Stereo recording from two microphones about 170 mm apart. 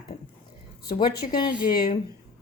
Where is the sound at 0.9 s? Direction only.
25° left (ahead or behind).